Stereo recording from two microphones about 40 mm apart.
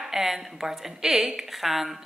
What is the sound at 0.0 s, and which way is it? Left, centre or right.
Speech, centre.